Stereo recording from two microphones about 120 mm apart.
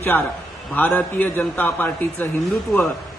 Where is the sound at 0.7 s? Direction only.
15° left (ahead or behind).